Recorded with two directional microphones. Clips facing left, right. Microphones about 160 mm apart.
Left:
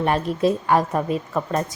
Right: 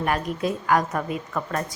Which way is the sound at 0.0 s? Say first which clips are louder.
Left 5 dB; 30° left (ahead or behind).